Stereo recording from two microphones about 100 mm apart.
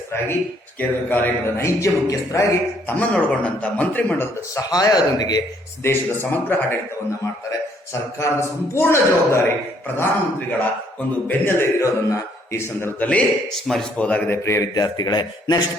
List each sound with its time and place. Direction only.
0.8 s a man's voice: 20° left (ahead or behind)
2.8 s speech: 15° left (ahead or behind)
4.5 s speech: 35° left (ahead or behind)
5.8 s a man's voice: 25° left (ahead or behind)
8.2 s a man's voice: 25° left (ahead or behind)
11.3 s a man's voice: 20° left (ahead or behind)
13.0 s speech: 15° left (ahead or behind)
13.5 s speech: centre (ahead or behind)
13.9 s speech: 15° left (ahead or behind)
14.4 s a man's voice: 30° left (ahead or behind)
14.8 s a man's voice: 45° left (ahead or behind)